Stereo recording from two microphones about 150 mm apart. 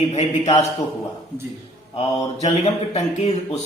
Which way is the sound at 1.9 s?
45° left (ahead or behind).